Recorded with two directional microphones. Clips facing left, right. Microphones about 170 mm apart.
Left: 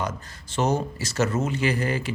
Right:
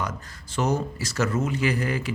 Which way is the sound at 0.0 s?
25° left (ahead or behind).